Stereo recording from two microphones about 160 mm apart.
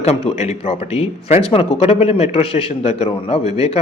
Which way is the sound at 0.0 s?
40° left (ahead or behind).